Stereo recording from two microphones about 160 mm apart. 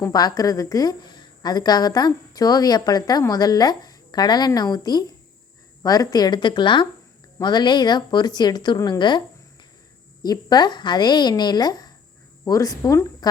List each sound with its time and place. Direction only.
0.0 s a woman's voice: 25° left (ahead or behind)
10.2 s a woman's voice: 25° left (ahead or behind)